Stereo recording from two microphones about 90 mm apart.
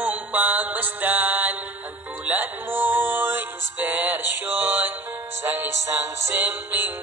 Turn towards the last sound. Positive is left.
turn(degrees=-30)  # may be behind; listen again after turning